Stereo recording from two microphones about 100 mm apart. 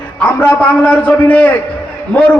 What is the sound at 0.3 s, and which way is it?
A man's voice, 15° left (ahead or behind).